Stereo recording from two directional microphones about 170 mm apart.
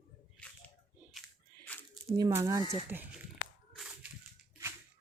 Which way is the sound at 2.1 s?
20° right (ahead or behind).